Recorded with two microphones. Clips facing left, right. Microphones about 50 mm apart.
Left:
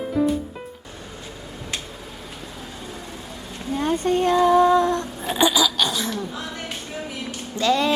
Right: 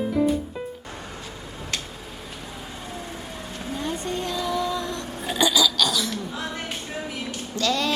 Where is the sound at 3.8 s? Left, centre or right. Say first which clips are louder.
Left 9 dB; left.